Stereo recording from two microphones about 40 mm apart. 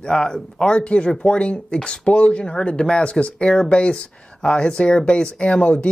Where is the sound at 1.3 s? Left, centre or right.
Left.